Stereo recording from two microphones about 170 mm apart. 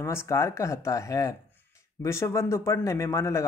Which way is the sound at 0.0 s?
15° left (ahead or behind).